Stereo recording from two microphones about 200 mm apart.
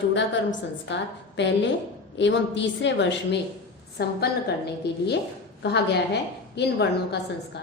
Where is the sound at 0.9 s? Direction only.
65° left (ahead or behind).